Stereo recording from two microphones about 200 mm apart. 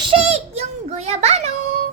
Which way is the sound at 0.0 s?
30° right (ahead or behind).